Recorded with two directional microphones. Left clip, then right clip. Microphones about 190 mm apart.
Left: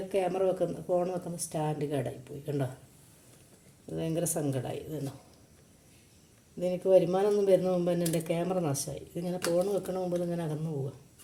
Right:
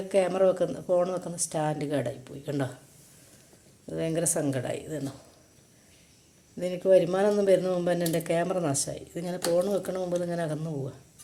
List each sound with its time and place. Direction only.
0.1 s a woman's voice: centre (ahead or behind)
3.9 s a woman's voice: centre (ahead or behind)
6.6 s a woman's voice: centre (ahead or behind)